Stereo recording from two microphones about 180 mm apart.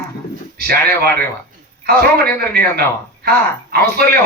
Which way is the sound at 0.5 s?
60° right (ahead or behind).